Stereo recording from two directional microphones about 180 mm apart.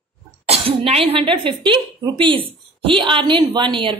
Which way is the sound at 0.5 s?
35° right (ahead or behind).